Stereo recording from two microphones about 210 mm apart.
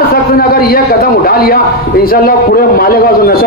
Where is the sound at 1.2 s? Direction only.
45° left (ahead or behind).